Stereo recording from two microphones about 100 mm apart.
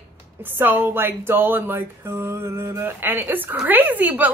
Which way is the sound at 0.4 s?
20° right (ahead or behind).